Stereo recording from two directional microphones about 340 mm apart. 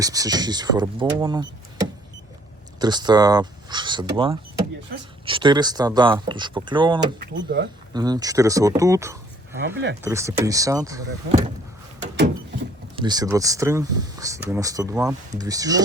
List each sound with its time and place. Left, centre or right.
0.0 s speech: centre
9.6 s speech: right
10.0 s speech: centre
13.0 s speech: centre